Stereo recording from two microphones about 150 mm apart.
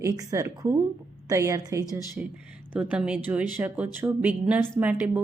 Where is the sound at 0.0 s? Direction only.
20° right (ahead or behind).